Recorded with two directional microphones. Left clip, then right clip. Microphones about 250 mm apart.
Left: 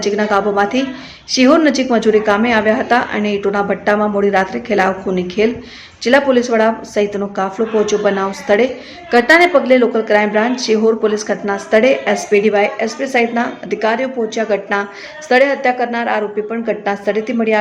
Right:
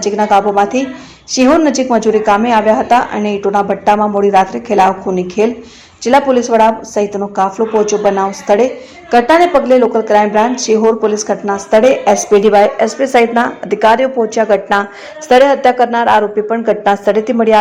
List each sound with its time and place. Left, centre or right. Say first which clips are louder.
0.0 s a woman's voice: right 4 dB; centre